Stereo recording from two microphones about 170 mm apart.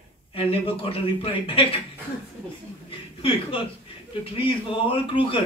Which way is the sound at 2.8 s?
30° left (ahead or behind).